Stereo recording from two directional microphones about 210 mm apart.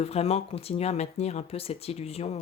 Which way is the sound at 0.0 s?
30° left (ahead or behind).